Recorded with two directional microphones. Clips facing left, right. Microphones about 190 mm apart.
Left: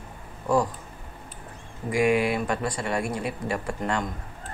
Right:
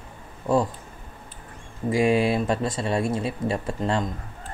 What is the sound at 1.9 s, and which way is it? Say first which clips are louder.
Speech: right 2 dB; 25° right (ahead or behind).